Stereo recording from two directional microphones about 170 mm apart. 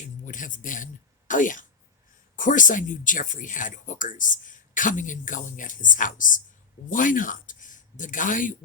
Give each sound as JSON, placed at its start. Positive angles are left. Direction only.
{"t": 0.3, "sound": "speech", "side_deg": 50}